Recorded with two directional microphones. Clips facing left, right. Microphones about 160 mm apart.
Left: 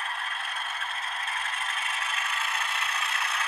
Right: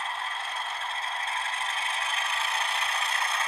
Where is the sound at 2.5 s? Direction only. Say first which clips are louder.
Right 2 dB; 35° right (ahead or behind).